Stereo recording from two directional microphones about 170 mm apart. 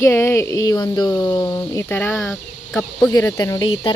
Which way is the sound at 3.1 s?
20° left (ahead or behind).